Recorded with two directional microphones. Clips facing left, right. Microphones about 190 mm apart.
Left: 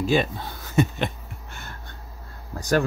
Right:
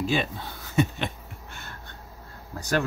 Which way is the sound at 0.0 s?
40° left (ahead or behind).